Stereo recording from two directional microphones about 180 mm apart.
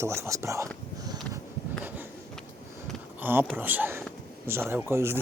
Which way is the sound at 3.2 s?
10° right (ahead or behind).